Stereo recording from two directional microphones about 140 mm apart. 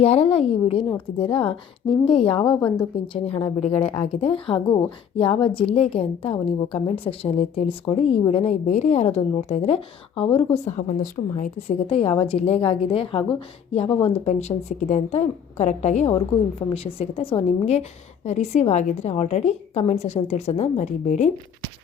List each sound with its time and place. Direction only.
0.0 s a woman's voice: 45° left (ahead or behind)
8.6 s a woman's voice: 55° left (ahead or behind); by 10.6 s 40° left (ahead or behind)
10.7 s a woman's voice: 60° left (ahead or behind)
11.5 s a woman's voice: 45° left (ahead or behind)
16.1 s a woman's voice: 45° left (ahead or behind)